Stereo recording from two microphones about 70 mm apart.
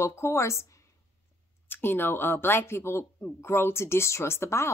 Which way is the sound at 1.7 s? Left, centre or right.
Left.